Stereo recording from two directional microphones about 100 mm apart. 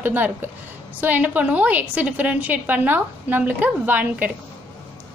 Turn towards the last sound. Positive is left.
turn(degrees=-15)  # may be behind; listen again after turning